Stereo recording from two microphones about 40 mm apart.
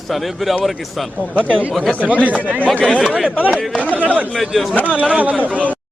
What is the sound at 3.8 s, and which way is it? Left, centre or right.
Speech, left.